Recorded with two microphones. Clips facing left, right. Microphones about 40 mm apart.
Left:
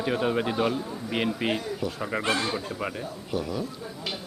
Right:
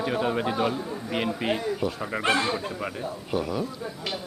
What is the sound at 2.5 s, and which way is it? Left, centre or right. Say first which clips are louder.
Speech: even; centre.